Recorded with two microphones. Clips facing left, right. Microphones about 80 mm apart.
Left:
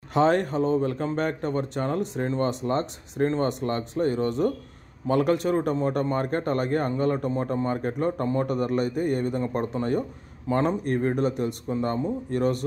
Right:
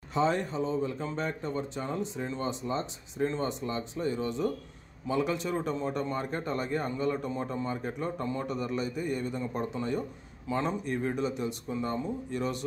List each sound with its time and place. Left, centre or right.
0.1 s a man's voice: left